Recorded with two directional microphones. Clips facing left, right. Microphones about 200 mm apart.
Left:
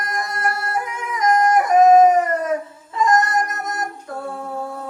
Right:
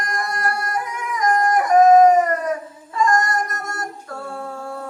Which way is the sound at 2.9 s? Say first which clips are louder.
Left 1 dB; 20° left (ahead or behind).